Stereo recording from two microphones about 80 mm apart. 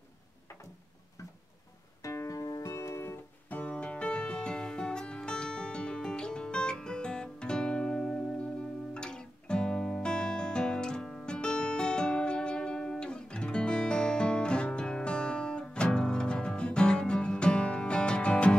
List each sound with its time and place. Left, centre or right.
2.0 s music: left
3.4 s music: centre